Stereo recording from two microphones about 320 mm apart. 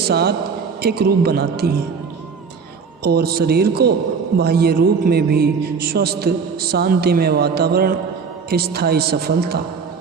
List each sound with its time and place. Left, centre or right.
0.1 s a man's voice: right
3.0 s a man's voice: right